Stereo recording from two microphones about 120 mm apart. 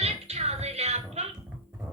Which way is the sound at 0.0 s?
60° right (ahead or behind).